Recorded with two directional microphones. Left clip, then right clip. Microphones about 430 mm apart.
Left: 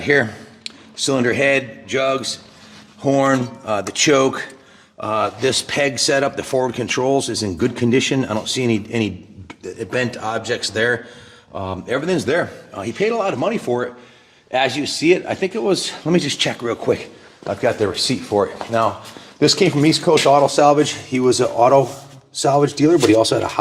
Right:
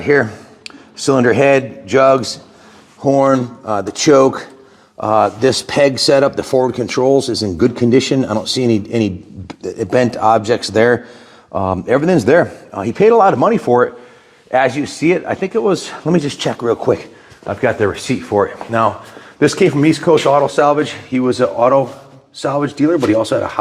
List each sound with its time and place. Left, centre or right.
0.0 s speech: centre
0.6 s a man's voice: centre; by 2.4 s right
3.0 s speech: centre
4.9 s speech: right
9.6 s a man's voice: right
15.0 s speech: centre
17.5 s speech: right; by 23.5 s centre